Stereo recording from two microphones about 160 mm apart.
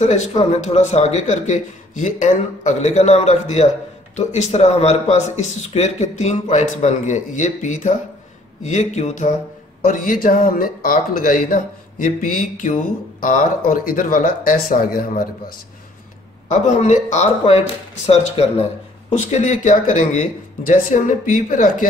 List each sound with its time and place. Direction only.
0.0 s a man's voice: 40° left (ahead or behind); by 15.5 s 65° left (ahead or behind)
16.4 s a man's voice: 50° left (ahead or behind)